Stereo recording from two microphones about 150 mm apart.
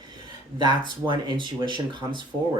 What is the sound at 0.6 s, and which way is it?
Speech, 30° right (ahead or behind).